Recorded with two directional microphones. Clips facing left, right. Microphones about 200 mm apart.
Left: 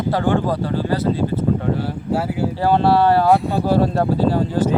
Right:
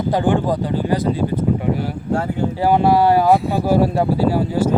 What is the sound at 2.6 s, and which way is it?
Speech, 15° right (ahead or behind).